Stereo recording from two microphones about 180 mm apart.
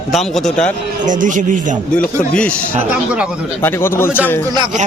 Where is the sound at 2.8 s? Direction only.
5° right (ahead or behind).